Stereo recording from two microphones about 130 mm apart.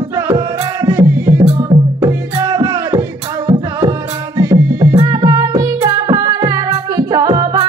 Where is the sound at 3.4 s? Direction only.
50° right (ahead or behind).